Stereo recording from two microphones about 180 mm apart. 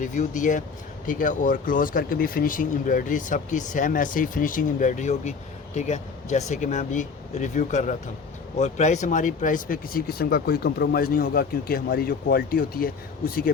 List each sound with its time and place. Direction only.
0.0 s speech: 45° left (ahead or behind)